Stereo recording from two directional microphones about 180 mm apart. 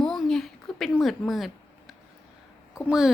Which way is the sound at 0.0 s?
Centre (ahead or behind).